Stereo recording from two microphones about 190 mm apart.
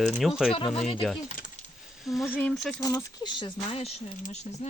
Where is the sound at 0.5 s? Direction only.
30° left (ahead or behind).